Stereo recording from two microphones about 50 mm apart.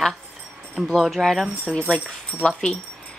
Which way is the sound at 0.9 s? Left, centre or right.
Centre.